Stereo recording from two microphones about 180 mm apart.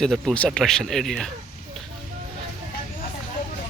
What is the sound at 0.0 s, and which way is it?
Speech, centre (ahead or behind).